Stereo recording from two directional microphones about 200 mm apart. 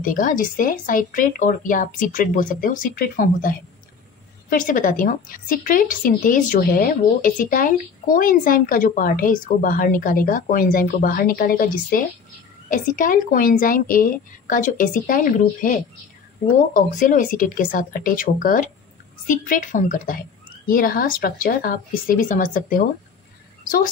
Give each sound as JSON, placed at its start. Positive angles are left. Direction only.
{"t": 0.0, "sound": "speech", "side_deg": 40}